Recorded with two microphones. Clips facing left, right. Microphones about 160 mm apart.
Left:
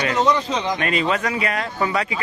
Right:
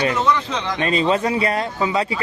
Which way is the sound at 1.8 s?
20° right (ahead or behind).